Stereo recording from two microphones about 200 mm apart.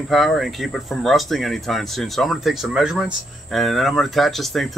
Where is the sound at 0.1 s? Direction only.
Centre (ahead or behind).